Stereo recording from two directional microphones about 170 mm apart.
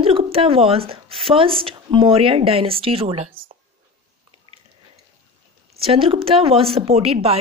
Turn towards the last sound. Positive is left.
turn(degrees=-35)  # may be behind; listen again after turning